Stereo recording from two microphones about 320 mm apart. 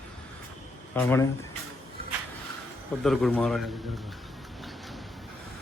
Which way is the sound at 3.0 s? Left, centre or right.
Centre.